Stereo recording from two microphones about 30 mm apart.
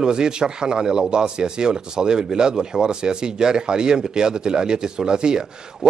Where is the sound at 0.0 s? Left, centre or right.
Right.